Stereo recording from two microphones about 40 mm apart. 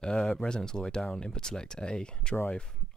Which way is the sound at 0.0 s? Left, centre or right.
Centre.